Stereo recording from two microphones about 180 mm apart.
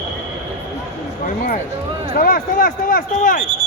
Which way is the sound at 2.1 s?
50° left (ahead or behind).